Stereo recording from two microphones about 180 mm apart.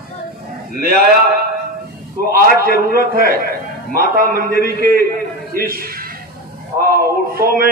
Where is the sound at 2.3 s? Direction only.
55° right (ahead or behind).